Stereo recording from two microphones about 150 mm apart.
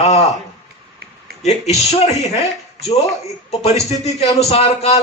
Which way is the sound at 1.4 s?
45° left (ahead or behind).